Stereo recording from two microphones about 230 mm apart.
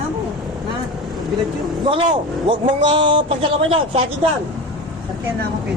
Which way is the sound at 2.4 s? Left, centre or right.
Right.